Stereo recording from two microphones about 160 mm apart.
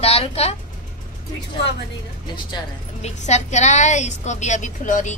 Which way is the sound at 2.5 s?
25° left (ahead or behind).